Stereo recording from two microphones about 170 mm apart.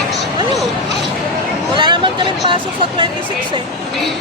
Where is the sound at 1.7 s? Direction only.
30° right (ahead or behind).